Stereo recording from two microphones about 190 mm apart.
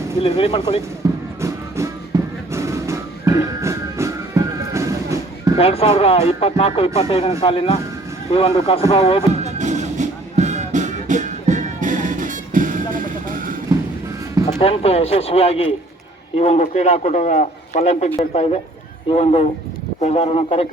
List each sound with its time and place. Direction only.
0.2 s speech: 30° left (ahead or behind)
1.0 s music: 20° right (ahead or behind)
5.5 s speech: 30° left (ahead or behind)
9.4 s music: 40° right (ahead or behind)
14.6 s speech: 30° left (ahead or behind)